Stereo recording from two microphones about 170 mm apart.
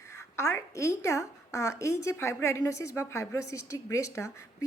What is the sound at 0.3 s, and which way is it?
A woman's voice, 15° left (ahead or behind).